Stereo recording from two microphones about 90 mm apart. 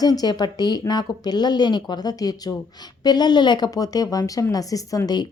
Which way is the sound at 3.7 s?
45° left (ahead or behind).